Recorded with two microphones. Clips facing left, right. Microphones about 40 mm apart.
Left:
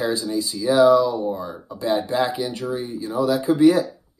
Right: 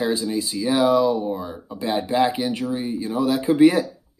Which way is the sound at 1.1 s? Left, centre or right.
Centre.